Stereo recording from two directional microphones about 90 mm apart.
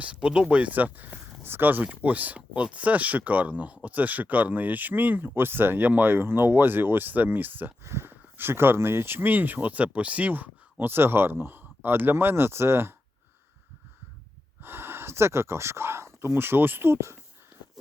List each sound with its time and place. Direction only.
0.0 s speech: 10° right (ahead or behind); by 12.9 s 25° right (ahead or behind)
14.6 s speech: 25° right (ahead or behind)